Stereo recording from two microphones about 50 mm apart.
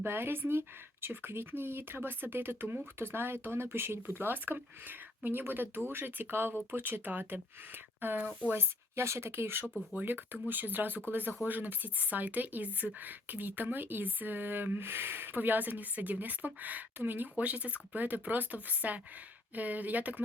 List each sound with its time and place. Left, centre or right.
0.0 s speech: right
8.5 s speech: right
10.0 s speech: right